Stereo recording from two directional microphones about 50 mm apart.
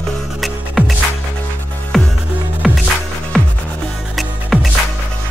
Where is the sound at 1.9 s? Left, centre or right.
Centre.